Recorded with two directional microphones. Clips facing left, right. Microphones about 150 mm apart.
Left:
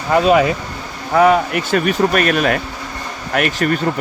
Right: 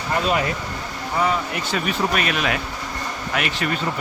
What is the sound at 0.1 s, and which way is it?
Speech, 90° left.